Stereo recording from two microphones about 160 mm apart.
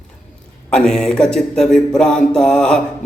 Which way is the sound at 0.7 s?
5° left (ahead or behind).